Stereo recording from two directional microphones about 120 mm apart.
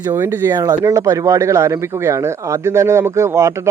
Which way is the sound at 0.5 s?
30° right (ahead or behind).